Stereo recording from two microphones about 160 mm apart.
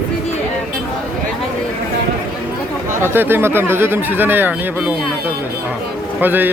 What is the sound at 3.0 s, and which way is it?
Speech, 15° right (ahead or behind).